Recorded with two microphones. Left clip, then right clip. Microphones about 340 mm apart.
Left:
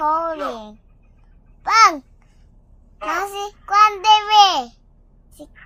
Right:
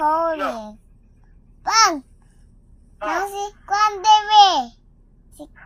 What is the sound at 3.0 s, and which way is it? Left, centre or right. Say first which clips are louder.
Speech: even; centre.